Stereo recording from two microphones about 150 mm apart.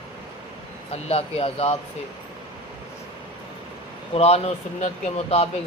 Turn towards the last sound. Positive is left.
turn(degrees=45)  # may be behind; listen again after turning